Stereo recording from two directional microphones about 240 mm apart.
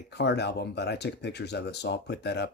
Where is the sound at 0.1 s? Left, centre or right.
Left.